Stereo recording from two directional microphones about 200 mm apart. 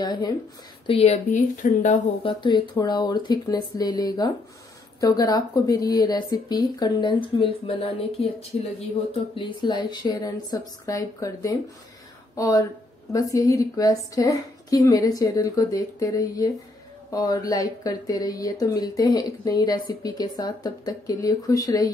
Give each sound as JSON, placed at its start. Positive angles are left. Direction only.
{"t": 0.0, "sound": "speech", "side_deg": 20}
{"t": 0.8, "sound": "speech", "side_deg": 30}
{"t": 2.2, "sound": "a woman's voice", "side_deg": 25}